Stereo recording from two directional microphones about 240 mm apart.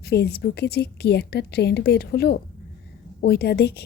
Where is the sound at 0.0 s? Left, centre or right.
Left.